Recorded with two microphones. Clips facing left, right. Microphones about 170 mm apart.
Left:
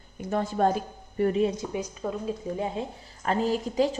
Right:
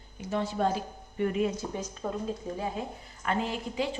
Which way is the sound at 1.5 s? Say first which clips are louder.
Left 3 dB; 10° left (ahead or behind).